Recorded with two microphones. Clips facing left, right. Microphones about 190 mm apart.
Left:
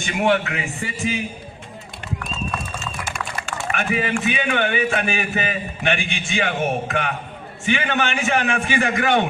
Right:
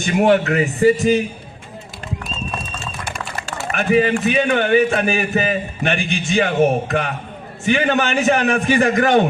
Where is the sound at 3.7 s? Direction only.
40° right (ahead or behind).